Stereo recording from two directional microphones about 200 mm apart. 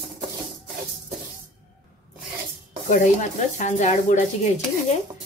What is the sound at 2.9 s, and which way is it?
Speech, 40° left (ahead or behind).